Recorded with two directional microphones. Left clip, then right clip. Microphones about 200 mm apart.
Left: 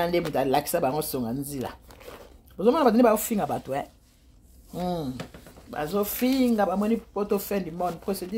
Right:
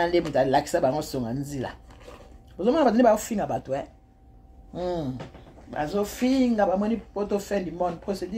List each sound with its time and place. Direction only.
0.0 s speech: 45° left (ahead or behind)